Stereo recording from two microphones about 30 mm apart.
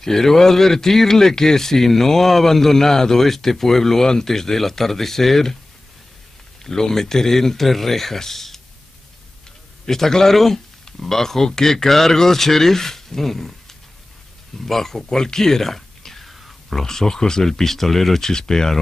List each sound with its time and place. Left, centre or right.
0.0 s speech: centre
6.6 s speech: centre
9.8 s speech: centre
18.3 s speech: left